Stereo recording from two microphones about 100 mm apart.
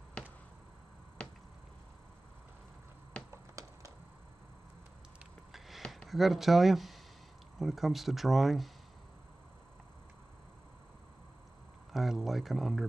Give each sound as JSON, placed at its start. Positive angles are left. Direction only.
{"t": 5.5, "sound": "a sound", "side_deg": 0}
{"t": 6.0, "sound": "speech", "side_deg": 0}
{"t": 11.9, "sound": "speech", "side_deg": 0}